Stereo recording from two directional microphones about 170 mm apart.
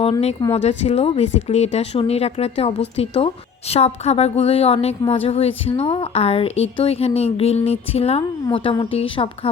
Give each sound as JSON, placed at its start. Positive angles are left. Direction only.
{"t": 0.0, "sound": "a woman's voice", "side_deg": 35}